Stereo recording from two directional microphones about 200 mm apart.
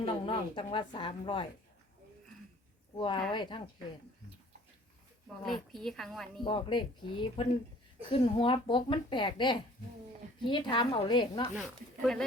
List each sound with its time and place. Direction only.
0.0 s a woman's voice: 25° left (ahead or behind)
3.0 s a woman's voice: 25° left (ahead or behind)
5.4 s a woman's voice: centre (ahead or behind)
6.4 s a woman's voice: 25° left (ahead or behind)